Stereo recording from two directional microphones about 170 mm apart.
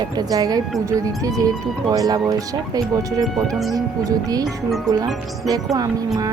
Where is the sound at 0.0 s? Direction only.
20° right (ahead or behind).